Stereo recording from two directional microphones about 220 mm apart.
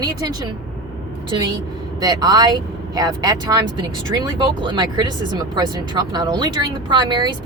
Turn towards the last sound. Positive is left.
turn(degrees=-20)  # may be behind; listen again after turning